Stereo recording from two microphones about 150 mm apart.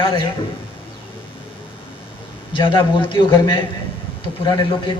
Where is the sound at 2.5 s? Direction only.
30° left (ahead or behind).